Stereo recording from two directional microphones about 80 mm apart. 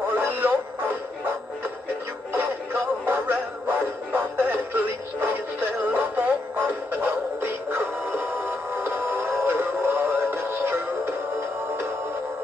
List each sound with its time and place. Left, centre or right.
0.1 s music: right
2.3 s music: right